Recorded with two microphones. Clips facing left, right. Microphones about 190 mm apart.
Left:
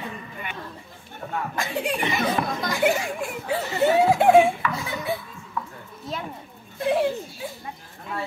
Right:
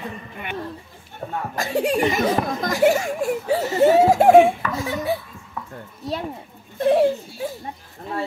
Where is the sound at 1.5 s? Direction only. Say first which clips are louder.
Right 8 dB; 40° right (ahead or behind).